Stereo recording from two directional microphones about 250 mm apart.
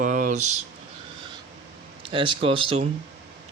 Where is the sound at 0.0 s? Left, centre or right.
Right.